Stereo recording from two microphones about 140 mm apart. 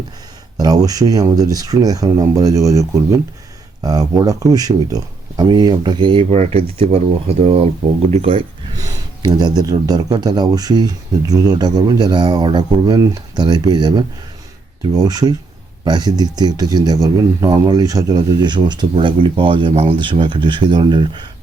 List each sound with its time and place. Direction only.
0.5 s speech: 25° right (ahead or behind); by 7.0 s 45° right (ahead or behind)
8.1 s speech: 40° right (ahead or behind)
8.8 s speech: 25° right (ahead or behind)